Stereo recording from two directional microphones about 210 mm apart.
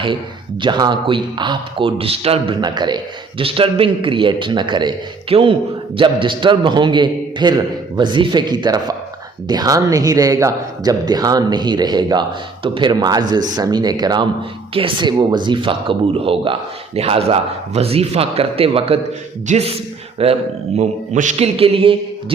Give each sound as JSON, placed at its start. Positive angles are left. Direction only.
{"t": 0.6, "sound": "speech", "side_deg": -20}